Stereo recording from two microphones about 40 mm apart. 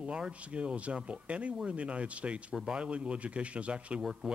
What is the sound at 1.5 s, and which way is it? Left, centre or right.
Speech, centre.